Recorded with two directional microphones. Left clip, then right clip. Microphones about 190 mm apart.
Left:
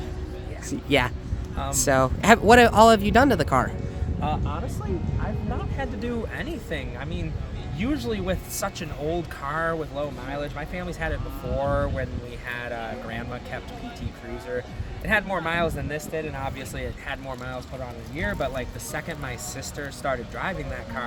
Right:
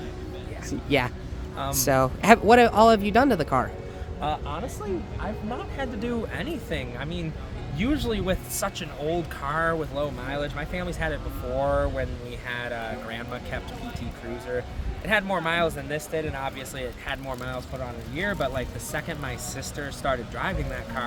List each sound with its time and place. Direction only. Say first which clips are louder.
0.9 s speech: left 2 dB; 15° left (ahead or behind)
4.2 s speech: even; 5° left (ahead or behind)
15.0 s speech: even; 5° left (ahead or behind)